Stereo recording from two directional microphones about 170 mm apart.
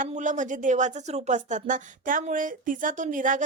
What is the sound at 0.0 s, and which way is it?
Speech, 45° right (ahead or behind).